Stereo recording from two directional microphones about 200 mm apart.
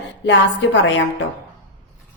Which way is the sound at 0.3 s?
65° left (ahead or behind).